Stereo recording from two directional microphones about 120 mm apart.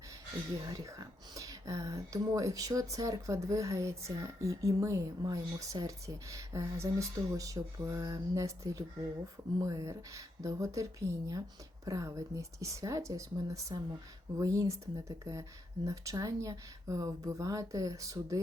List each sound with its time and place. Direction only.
0.9 s speech: 30° right (ahead or behind)